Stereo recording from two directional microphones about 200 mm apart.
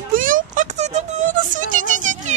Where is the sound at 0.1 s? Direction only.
40° right (ahead or behind).